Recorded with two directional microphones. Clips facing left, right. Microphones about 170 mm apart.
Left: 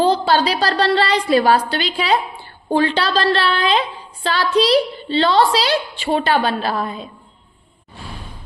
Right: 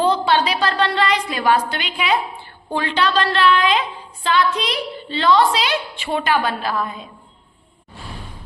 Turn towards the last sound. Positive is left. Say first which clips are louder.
# left 2 dB
turn(degrees=30)  # may be behind; listen again after turning